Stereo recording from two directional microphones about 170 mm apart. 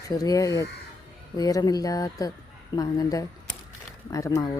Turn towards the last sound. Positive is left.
turn(degrees=20)  # may be behind; listen again after turning